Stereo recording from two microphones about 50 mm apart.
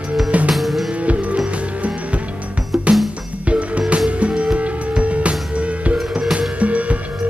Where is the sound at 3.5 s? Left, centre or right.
Right.